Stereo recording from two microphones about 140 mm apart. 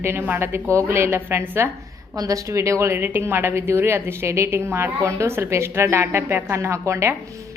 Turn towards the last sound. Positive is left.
turn(degrees=-20)  # may be behind; listen again after turning